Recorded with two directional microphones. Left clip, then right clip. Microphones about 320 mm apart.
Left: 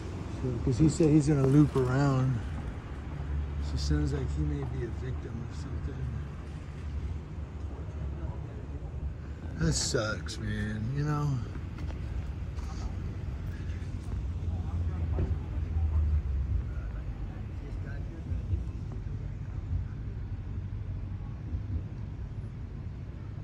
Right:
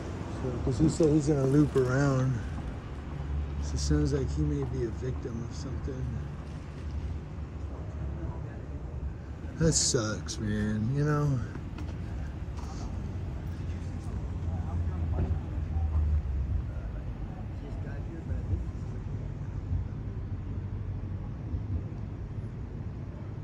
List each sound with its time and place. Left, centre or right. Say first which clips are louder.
0.7 s speech: even; centre
1.7 s speech: right 2 dB; centre
3.7 s speech: right 4 dB; centre
9.6 s speech: right 3 dB; centre